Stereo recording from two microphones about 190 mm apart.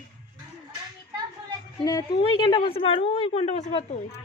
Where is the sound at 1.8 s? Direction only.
20° left (ahead or behind).